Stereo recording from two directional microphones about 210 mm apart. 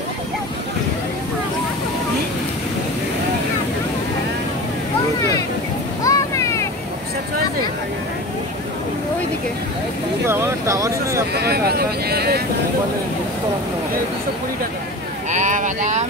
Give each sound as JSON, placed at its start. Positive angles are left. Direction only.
{"t": 6.0, "sound": "vehicle", "side_deg": 15}
{"t": 10.2, "sound": "vehicle", "side_deg": -10}
{"t": 11.3, "sound": "vehicle", "side_deg": -50}
{"t": 15.3, "sound": "a sound", "side_deg": -35}